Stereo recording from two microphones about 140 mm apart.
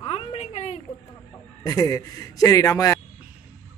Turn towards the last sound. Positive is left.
turn(degrees=25)  # may be behind; listen again after turning